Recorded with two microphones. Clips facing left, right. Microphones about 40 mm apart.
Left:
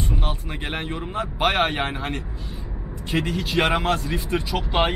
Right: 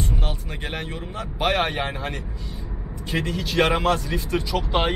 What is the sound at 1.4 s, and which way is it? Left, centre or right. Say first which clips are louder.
Speech: left 1 dB; centre.